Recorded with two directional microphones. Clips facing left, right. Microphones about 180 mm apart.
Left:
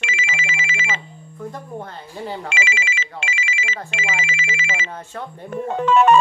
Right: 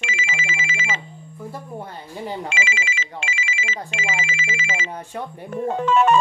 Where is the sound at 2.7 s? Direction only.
70° left (ahead or behind).